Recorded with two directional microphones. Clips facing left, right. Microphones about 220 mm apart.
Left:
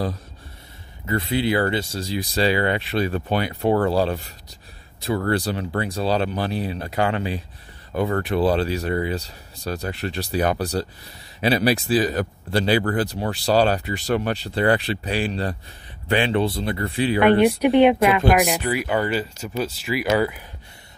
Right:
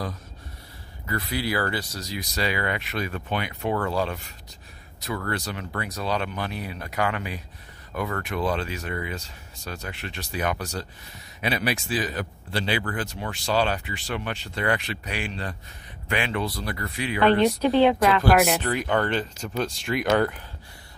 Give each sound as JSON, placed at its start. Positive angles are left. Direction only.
{"t": 1.0, "sound": "speech", "side_deg": 25}
{"t": 17.2, "sound": "speech", "side_deg": 15}